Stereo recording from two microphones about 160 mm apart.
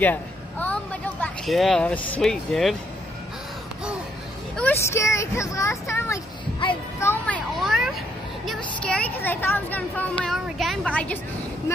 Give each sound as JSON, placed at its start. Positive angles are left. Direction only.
{"t": 0.0, "sound": "speech", "side_deg": 10}
{"t": 4.6, "sound": "speech", "side_deg": 15}
{"t": 7.0, "sound": "a sound", "side_deg": 10}
{"t": 8.5, "sound": "a woman's voice", "side_deg": 5}